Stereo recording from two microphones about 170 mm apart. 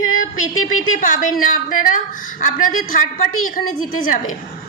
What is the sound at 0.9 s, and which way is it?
A woman's voice, 50° left (ahead or behind).